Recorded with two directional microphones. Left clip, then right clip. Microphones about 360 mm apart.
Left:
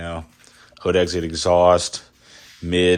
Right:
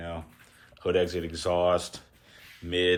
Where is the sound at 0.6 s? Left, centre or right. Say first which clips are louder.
Left 7 dB; centre.